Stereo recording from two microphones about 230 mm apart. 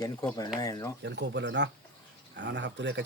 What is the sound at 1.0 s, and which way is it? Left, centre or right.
Speech, right.